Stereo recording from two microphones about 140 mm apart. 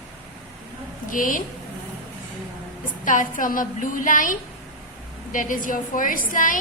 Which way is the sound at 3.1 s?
70° left (ahead or behind).